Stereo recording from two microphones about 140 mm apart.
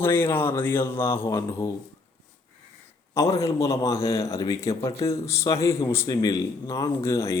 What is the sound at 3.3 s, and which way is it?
A man's voice, 20° left (ahead or behind).